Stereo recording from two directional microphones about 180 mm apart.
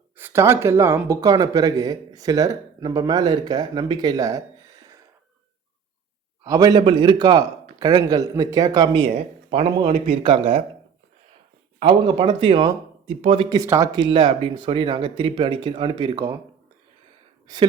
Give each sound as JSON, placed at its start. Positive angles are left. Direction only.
{"t": 0.2, "sound": "speech", "side_deg": -10}
{"t": 6.4, "sound": "speech", "side_deg": -20}
{"t": 11.8, "sound": "speech", "side_deg": -25}
{"t": 17.4, "sound": "a sound", "side_deg": -25}